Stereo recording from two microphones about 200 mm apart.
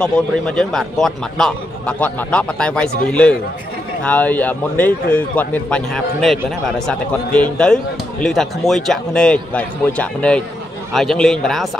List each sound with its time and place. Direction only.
0.0 s speech: 5° left (ahead or behind)
7.3 s speech: 5° left (ahead or behind)